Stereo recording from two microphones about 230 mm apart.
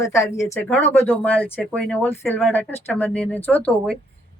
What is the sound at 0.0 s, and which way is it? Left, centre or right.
Speech, centre.